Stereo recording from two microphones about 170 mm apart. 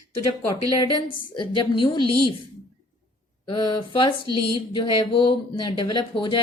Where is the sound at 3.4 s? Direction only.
25° left (ahead or behind).